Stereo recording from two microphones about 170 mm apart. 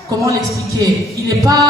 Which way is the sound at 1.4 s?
20° right (ahead or behind).